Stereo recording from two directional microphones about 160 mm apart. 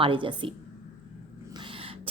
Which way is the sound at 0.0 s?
30° right (ahead or behind).